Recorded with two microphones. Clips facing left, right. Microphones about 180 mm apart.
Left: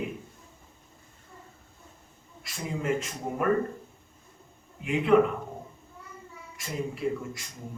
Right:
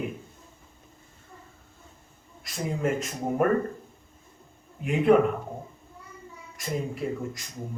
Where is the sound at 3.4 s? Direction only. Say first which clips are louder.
Right 2 dB; 45° right (ahead or behind).